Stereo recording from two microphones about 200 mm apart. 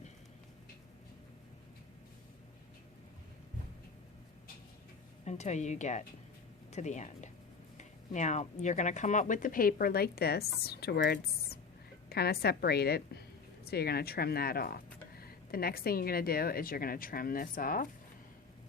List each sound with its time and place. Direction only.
5.2 s a woman's voice: 35° left (ahead or behind)